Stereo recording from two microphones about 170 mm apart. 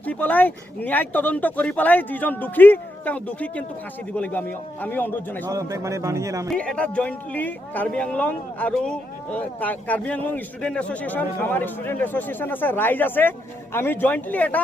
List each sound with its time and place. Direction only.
0.0 s a man's voice: 10° left (ahead or behind)
5.5 s a man's voice: 20° right (ahead or behind)
6.5 s a man's voice: 5° left (ahead or behind)